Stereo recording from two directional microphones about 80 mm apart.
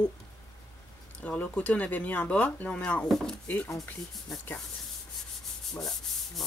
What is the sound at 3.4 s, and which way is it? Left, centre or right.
Speech, left.